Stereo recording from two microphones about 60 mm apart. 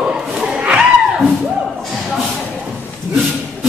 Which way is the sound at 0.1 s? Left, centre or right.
Centre.